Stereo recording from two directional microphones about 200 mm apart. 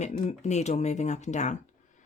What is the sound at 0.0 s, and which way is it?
Speech, 35° left (ahead or behind).